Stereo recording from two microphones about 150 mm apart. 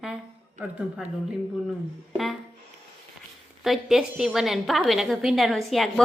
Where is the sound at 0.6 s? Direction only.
10° right (ahead or behind).